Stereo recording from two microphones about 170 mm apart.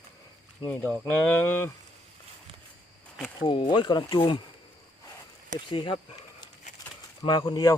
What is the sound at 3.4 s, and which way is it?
Speech, 25° left (ahead or behind).